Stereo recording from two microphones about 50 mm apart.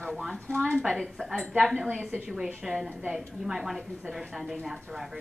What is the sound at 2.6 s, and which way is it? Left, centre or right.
A woman's voice, centre.